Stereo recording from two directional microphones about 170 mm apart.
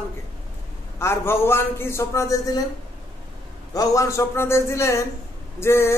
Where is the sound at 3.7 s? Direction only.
20° left (ahead or behind).